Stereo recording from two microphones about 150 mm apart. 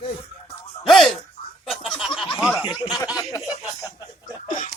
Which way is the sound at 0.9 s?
Centre (ahead or behind).